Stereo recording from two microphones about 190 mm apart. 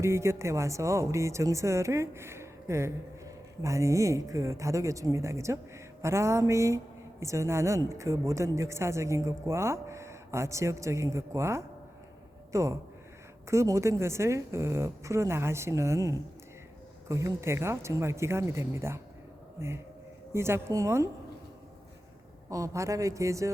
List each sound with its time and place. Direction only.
0.0 s a man's voice: 15° right (ahead or behind)
22.4 s speech: 15° right (ahead or behind)